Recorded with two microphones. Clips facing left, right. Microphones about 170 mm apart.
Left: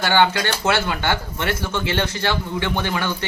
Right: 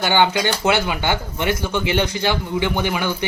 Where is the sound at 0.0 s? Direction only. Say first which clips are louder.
Right 1 dB; 15° right (ahead or behind).